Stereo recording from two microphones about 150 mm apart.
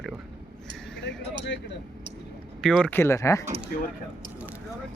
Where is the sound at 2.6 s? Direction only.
5° left (ahead or behind).